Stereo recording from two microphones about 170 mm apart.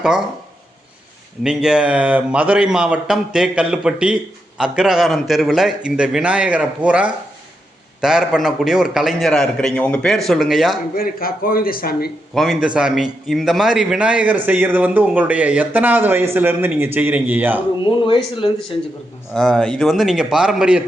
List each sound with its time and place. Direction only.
1.5 s speech: 5° right (ahead or behind)
10.9 s speech: 60° left (ahead or behind)
12.3 s a man's voice: centre (ahead or behind)
17.8 s a man's voice: 30° left (ahead or behind)
19.3 s speech: centre (ahead or behind)